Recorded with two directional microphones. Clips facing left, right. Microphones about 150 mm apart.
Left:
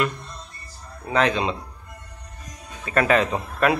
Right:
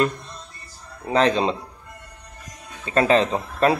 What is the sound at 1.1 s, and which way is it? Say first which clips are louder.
Speech: right 2 dB; 35° right (ahead or behind).